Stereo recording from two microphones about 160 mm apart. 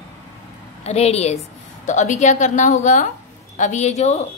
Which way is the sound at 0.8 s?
40° left (ahead or behind).